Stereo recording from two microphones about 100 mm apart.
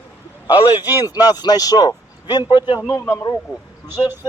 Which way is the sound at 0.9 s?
40° left (ahead or behind).